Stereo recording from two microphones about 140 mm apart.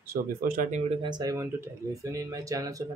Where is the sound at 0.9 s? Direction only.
30° right (ahead or behind).